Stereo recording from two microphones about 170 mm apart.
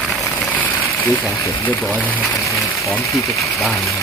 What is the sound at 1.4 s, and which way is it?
Speech, 15° left (ahead or behind).